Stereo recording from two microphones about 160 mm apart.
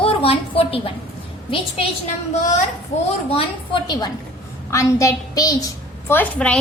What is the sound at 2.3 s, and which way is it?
Speech, 50° left (ahead or behind).